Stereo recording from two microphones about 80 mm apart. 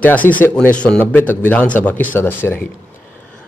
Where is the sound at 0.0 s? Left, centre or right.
Left.